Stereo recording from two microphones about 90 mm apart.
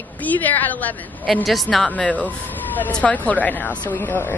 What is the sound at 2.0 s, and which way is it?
A woman's voice, 15° left (ahead or behind).